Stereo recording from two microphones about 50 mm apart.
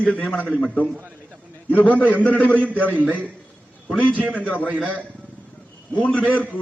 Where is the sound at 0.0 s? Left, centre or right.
Left.